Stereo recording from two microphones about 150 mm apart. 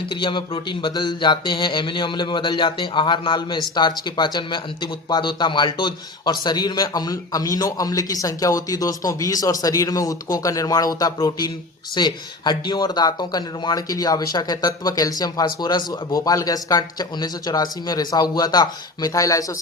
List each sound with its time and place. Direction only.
0.0 s speech: 35° left (ahead or behind)